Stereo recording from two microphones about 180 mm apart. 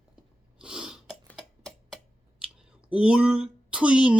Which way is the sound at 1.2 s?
Centre (ahead or behind).